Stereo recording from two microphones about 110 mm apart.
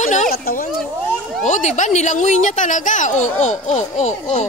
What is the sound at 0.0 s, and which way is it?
Speech, 90° left.